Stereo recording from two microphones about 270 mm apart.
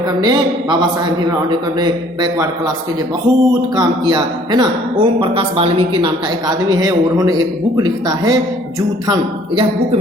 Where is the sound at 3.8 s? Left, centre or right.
Centre.